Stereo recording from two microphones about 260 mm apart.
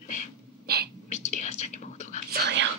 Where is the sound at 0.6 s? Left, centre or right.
Right.